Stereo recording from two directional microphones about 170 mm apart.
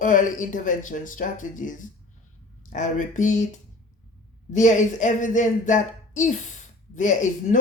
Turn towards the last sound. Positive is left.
turn(degrees=45)  # may be behind; listen again after turning